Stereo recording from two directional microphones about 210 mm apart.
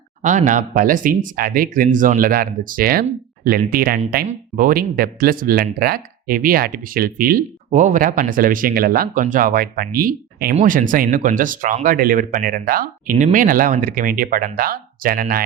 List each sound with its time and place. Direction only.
0.2 s speech: 35° right (ahead or behind)